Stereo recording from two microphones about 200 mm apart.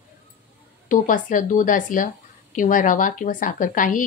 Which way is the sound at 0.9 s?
40° left (ahead or behind).